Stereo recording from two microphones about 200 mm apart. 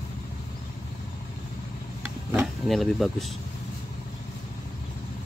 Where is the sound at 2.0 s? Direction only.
5° right (ahead or behind).